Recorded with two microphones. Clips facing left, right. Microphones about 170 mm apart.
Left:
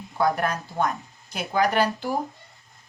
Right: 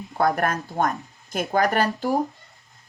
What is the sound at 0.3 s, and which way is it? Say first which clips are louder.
Speech: right 2 dB; 50° right (ahead or behind).